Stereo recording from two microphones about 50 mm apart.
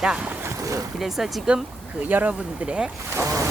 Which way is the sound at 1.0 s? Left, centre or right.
Centre.